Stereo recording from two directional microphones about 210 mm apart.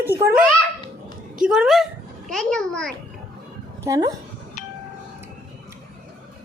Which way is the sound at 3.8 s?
15° right (ahead or behind).